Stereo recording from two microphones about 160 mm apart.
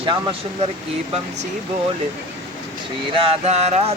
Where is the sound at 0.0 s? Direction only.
35° right (ahead or behind).